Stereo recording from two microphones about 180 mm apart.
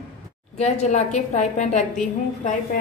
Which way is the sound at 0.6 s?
40° left (ahead or behind).